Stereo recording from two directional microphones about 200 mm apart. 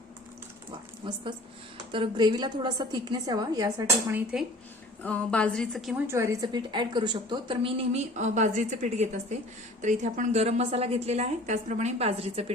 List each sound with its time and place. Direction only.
1.0 s a woman's voice: 25° right (ahead or behind)
5.0 s a woman's voice: 5° left (ahead or behind)
6.1 s a woman's voice: 15° right (ahead or behind); by 12.5 s 30° right (ahead or behind)